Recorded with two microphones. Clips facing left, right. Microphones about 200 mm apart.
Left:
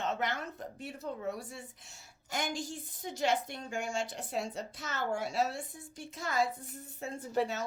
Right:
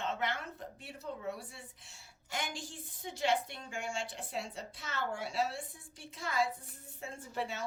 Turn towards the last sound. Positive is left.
turn(degrees=40)  # may be behind; listen again after turning